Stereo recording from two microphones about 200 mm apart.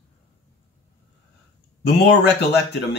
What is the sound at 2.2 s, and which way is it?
Speech, 55° left (ahead or behind).